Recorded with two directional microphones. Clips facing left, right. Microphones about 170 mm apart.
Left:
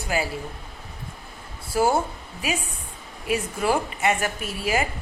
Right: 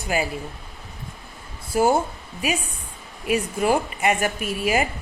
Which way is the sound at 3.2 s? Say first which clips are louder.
Right 3 dB; 15° right (ahead or behind).